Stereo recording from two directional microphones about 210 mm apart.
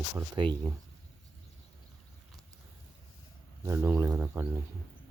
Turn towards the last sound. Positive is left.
turn(degrees=-10)  # may be behind; listen again after turning